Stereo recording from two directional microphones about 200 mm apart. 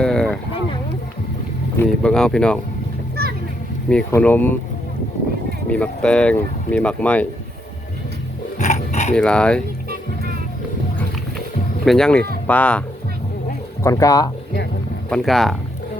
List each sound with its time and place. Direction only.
0.0 s a sound: 5° left (ahead or behind)
1.7 s speech: 5° left (ahead or behind)
3.2 s a sound: 50° right (ahead or behind)
3.8 s speech: 5° left (ahead or behind)
5.6 s speech: 5° left (ahead or behind)
8.5 s pig: 35° left (ahead or behind)
9.1 s speech: 5° left (ahead or behind)
11.9 s speech: 5° left (ahead or behind)
13.8 s speech: 15° left (ahead or behind)
15.1 s speech: centre (ahead or behind)